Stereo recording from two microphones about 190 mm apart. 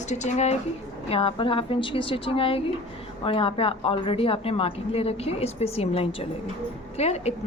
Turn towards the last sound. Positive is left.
turn(degrees=35)  # may be behind; listen again after turning